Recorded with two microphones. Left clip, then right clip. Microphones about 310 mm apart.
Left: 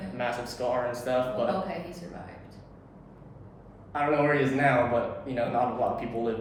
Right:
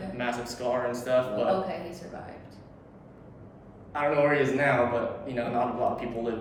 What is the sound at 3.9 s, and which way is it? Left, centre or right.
Speech, centre.